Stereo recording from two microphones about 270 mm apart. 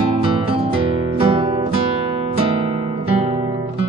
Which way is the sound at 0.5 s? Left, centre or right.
Centre.